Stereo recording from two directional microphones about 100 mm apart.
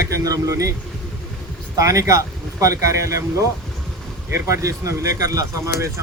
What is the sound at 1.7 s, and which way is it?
Speech, 35° right (ahead or behind).